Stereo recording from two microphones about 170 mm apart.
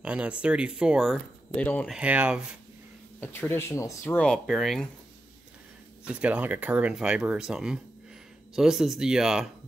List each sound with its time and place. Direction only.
0.0 s speech: 5° right (ahead or behind)
3.2 s speech: 15° left (ahead or behind)
4.2 s speech: 5° left (ahead or behind)
6.0 s speech: 5° right (ahead or behind)